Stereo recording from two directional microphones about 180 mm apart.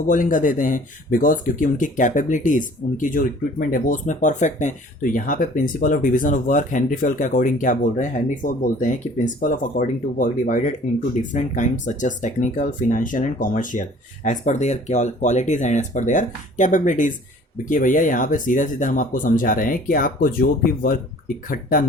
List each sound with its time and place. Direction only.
0.1 s speech: 45° left (ahead or behind)